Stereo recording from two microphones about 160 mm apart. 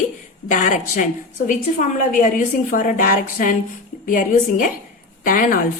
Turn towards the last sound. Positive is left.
turn(degrees=60)  # may be behind; listen again after turning